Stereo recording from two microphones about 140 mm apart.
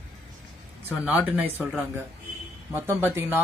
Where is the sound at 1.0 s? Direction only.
10° right (ahead or behind).